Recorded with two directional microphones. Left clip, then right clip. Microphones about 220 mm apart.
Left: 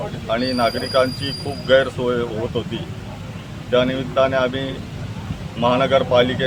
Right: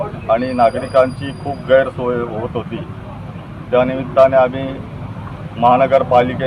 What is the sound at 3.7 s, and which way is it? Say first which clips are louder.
Speech: right 4 dB; 20° left (ahead or behind).